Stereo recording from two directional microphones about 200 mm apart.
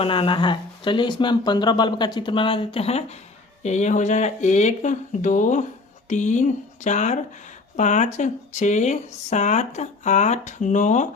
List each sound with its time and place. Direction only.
0.0 s speech: 25° left (ahead or behind)